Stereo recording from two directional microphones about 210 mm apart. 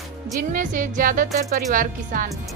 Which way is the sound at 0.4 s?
40° right (ahead or behind).